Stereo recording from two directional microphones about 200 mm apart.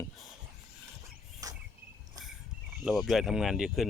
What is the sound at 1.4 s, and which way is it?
Cricket, 15° right (ahead or behind).